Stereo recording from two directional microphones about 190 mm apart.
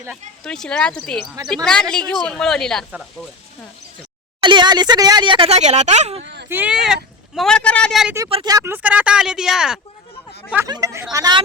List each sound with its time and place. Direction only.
0.4 s speech: 5° left (ahead or behind)
4.4 s speech: 25° right (ahead or behind)
6.5 s speech: 5° right (ahead or behind)
8.3 s speech: 30° right (ahead or behind)
8.5 s speech: 10° right (ahead or behind)
10.7 s speech: 20° right (ahead or behind)